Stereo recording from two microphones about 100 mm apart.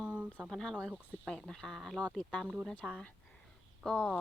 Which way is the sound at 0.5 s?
5° left (ahead or behind).